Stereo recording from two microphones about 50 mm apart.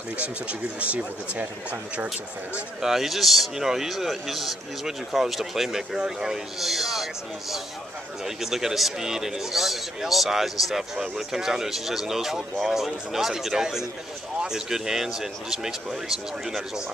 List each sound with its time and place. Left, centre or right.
0.2 s speech: right
2.8 s a man's voice: centre
8.4 s a man's voice: centre